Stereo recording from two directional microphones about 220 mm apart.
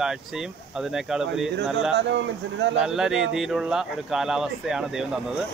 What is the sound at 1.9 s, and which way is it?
Speech, 55° right (ahead or behind).